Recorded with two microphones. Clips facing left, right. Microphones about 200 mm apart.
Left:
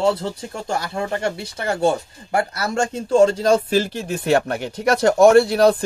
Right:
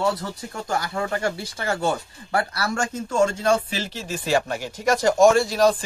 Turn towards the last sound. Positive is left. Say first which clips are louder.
# left 5 dB
turn(degrees=60)  # may be behind; listen again after turning